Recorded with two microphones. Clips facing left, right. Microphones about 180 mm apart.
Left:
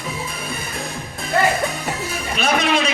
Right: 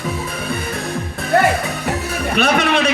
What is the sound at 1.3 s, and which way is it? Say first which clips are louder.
Music: right 3 dB; 65° right (ahead or behind).